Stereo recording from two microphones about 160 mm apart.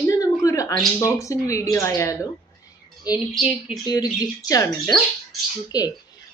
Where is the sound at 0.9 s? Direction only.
20° left (ahead or behind).